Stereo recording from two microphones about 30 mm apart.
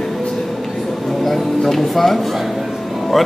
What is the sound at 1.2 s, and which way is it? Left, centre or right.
Music, centre.